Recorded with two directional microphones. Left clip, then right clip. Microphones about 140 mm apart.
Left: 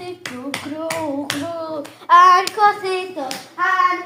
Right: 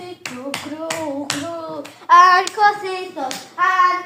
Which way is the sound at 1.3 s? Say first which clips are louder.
Even; 45° left (ahead or behind).